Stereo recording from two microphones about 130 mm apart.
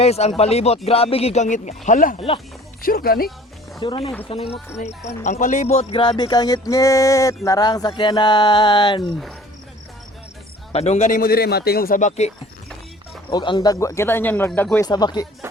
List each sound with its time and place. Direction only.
0.0 s speech: 55° left (ahead or behind); by 2.1 s 85° left
2.1 s speech: 45° left (ahead or behind)
2.8 s speech: 90° left
3.8 s speech: 40° left (ahead or behind)
5.0 s speech: 65° left (ahead or behind); by 9.1 s 35° left (ahead or behind)
10.7 s speech: 55° left (ahead or behind)
13.3 s speech: 35° left (ahead or behind); by 14.8 s 15° left (ahead or behind)
14.8 s speech: 30° left (ahead or behind)